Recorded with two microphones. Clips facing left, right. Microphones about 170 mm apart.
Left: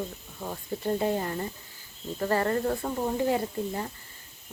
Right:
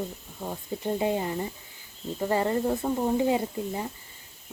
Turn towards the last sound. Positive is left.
turn(degrees=-10)  # may be behind; listen again after turning